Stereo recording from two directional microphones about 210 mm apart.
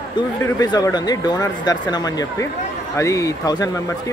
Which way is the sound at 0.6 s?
15° left (ahead or behind).